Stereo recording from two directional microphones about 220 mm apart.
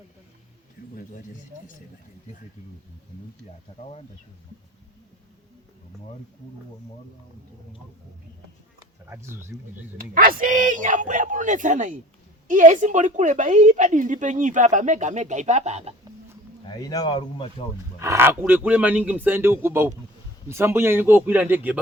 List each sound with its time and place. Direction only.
9.0 s speech: 10° right (ahead or behind)
10.0 s a woman's voice: 40° right (ahead or behind)
16.6 s speech: 15° left (ahead or behind)
18.0 s speech: 10° right (ahead or behind)